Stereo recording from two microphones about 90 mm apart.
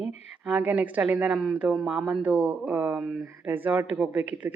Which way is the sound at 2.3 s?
15° right (ahead or behind).